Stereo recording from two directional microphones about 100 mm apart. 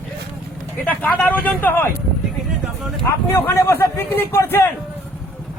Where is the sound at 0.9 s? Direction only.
20° left (ahead or behind).